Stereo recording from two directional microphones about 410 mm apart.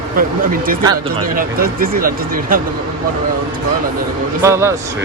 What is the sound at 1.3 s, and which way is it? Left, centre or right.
Speech, right.